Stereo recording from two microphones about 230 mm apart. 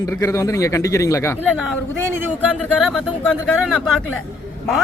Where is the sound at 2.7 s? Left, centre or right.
Centre.